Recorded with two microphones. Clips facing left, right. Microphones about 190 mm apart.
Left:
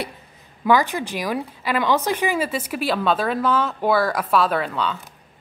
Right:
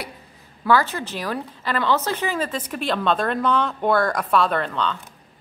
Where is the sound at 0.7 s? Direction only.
15° left (ahead or behind).